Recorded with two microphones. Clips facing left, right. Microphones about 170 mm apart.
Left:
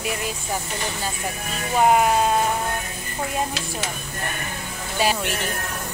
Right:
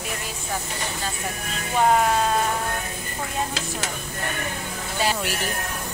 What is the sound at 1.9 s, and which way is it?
Speech, 15° left (ahead or behind).